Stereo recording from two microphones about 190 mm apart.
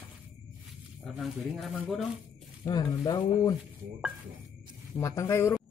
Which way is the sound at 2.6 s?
20° left (ahead or behind).